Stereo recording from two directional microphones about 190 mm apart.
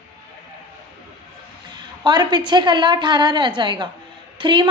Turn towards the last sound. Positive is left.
turn(degrees=-25)  # may be behind; listen again after turning